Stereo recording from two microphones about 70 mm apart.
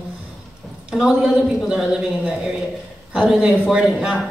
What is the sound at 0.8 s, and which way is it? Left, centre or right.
A woman's voice, centre.